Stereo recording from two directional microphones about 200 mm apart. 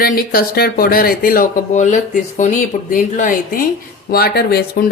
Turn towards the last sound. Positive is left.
turn(degrees=50)  # may be behind; listen again after turning